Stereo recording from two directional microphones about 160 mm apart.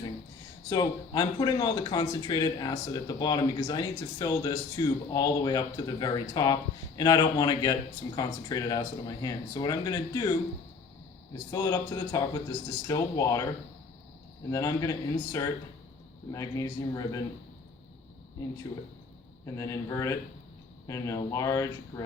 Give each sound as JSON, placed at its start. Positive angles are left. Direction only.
{"t": 0.7, "sound": "a man's voice", "side_deg": 25}
{"t": 11.5, "sound": "a man's voice", "side_deg": 20}
{"t": 14.5, "sound": "a man's voice", "side_deg": 20}
{"t": 18.6, "sound": "a man's voice", "side_deg": 20}